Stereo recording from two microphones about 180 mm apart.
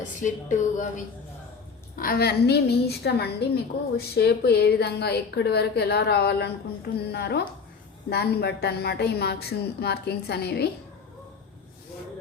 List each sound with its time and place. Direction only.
0.2 s speech: 45° left (ahead or behind)
2.0 s a woman's voice: 55° left (ahead or behind)